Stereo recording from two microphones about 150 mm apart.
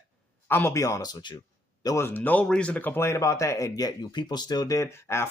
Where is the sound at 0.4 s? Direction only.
15° left (ahead or behind).